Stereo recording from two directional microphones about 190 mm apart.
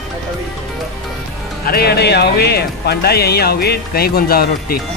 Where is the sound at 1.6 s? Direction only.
55° left (ahead or behind).